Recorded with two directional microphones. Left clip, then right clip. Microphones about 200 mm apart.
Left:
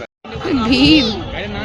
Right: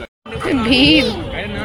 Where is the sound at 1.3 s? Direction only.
5° left (ahead or behind).